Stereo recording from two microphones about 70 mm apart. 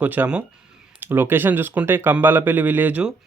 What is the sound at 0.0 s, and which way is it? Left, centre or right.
A man's voice, right.